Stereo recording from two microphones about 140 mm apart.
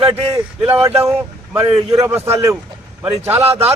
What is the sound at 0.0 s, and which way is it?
Speech, 45° right (ahead or behind).